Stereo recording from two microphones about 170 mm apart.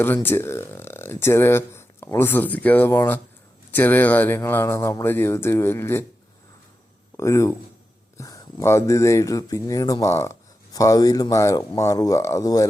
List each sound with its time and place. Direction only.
0.0 s speech: 10° left (ahead or behind)
7.2 s speech: 15° left (ahead or behind)